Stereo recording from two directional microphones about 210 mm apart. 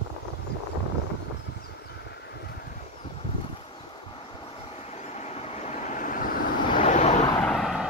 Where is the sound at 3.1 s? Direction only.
25° left (ahead or behind).